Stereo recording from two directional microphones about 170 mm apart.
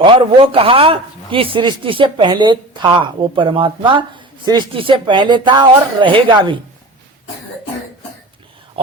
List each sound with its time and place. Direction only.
0.0 s a man's voice: 30° right (ahead or behind)